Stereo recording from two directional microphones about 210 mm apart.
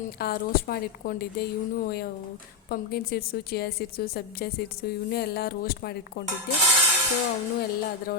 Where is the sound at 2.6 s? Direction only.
45° left (ahead or behind).